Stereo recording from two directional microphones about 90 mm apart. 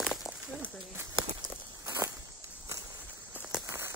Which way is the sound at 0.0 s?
Centre (ahead or behind).